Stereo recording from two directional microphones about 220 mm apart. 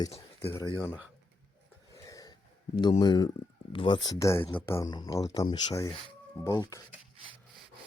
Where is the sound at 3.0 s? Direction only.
20° left (ahead or behind).